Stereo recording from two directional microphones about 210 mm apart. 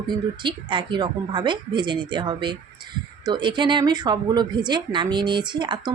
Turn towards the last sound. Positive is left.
turn(degrees=-20)  # may be behind; listen again after turning